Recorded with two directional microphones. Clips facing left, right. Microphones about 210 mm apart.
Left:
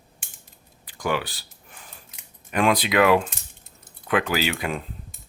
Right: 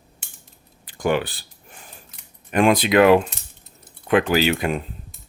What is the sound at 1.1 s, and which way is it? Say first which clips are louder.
Speech: right 5 dB; 55° right (ahead or behind).